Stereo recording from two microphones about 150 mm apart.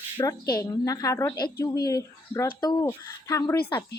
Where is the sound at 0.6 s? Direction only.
25° left (ahead or behind).